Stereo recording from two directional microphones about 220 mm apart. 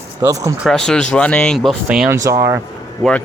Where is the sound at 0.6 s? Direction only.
Centre (ahead or behind).